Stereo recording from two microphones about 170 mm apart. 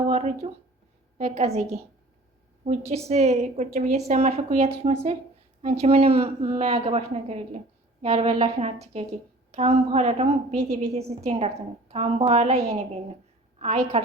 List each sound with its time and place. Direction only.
0.1 s a woman's voice: 40° right (ahead or behind)
2.6 s a woman's voice: 40° right (ahead or behind)
3.7 s speech: 55° right (ahead or behind)
4.1 s a woman's voice: 40° right (ahead or behind)